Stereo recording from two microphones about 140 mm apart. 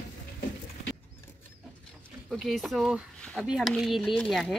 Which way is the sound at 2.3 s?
Centre (ahead or behind).